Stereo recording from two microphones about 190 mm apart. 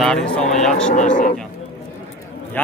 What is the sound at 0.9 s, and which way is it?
Speech, 45° left (ahead or behind).